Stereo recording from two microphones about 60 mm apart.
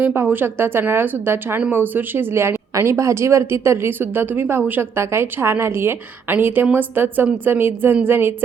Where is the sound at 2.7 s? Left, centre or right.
Right.